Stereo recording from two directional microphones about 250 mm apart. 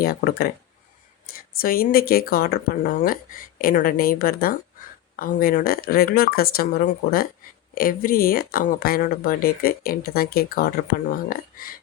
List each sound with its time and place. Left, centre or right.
0.0 s speech: left
1.5 s speech: left